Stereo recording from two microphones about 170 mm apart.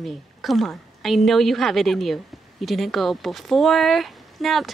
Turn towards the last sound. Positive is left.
turn(degrees=0)  # may be behind; listen again after turning